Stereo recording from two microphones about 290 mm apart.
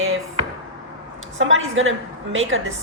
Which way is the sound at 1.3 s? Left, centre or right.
Right.